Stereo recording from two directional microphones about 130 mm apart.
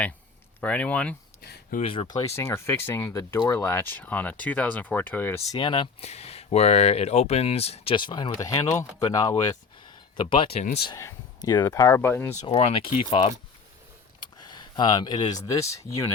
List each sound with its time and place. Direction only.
0.6 s speech: 10° left (ahead or behind)
1.8 s speech: 50° left (ahead or behind)
2.0 s speech: 30° left (ahead or behind)
2.3 s speech: 20° left (ahead or behind)
5.5 s speech: 40° left (ahead or behind)
6.0 s speech: 55° left (ahead or behind)
7.9 s speech: 35° left (ahead or behind)
10.2 s speech: 40° left (ahead or behind)
11.3 s speech: 30° left (ahead or behind)
11.9 s speech: 15° left (ahead or behind)
12.5 s speech: 50° left (ahead or behind)
14.2 s a sound: 35° left (ahead or behind)
15.4 s speech: 25° left (ahead or behind)